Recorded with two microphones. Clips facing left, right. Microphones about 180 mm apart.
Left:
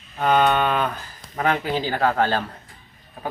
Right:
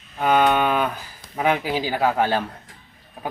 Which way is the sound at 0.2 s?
5° right (ahead or behind).